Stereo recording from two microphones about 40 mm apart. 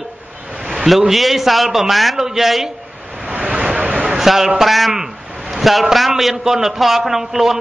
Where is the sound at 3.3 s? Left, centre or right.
Right.